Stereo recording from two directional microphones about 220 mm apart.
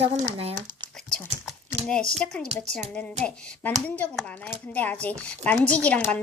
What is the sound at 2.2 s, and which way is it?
Speech, 5° left (ahead or behind).